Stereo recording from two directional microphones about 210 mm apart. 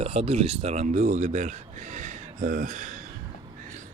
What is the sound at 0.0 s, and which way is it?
A man's voice, 30° right (ahead or behind).